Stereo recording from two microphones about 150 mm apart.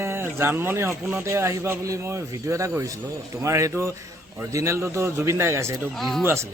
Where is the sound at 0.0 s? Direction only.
15° right (ahead or behind).